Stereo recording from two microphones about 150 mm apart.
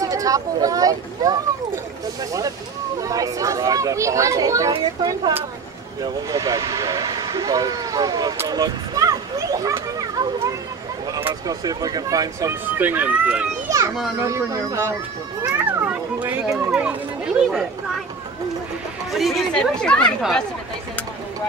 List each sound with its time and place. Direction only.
0.0 s speech: 25° right (ahead or behind)
3.0 s speech: 20° right (ahead or behind)
6.3 s speech: 25° right (ahead or behind)
8.5 s a sound: 25° right (ahead or behind)
11.1 s speech: 20° right (ahead or behind)
13.7 s children playing: 20° right (ahead or behind)
14.2 s speech: 20° right (ahead or behind)
15.4 s children playing: 15° right (ahead or behind)
16.4 s speech: 5° right (ahead or behind)
19.1 s speech: centre (ahead or behind)